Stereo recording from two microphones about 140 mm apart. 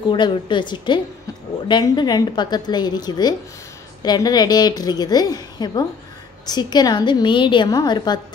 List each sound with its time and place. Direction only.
0.1 s a woman's voice: 35° left (ahead or behind)